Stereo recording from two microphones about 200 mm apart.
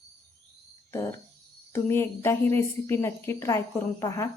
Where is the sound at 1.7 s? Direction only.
10° left (ahead or behind).